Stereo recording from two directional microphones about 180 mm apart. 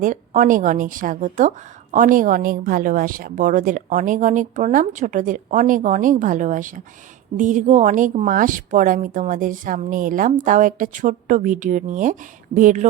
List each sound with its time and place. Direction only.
0.0 s a woman's voice: 45° right (ahead or behind)